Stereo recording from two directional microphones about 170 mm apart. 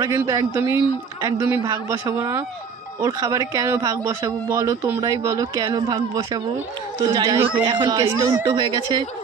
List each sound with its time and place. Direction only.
0.0 s speech: 20° right (ahead or behind)